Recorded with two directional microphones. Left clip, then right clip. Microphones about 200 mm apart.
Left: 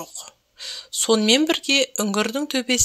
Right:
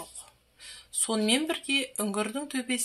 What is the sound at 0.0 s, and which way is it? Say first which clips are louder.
Speech: left 9 dB; 40° left (ahead or behind).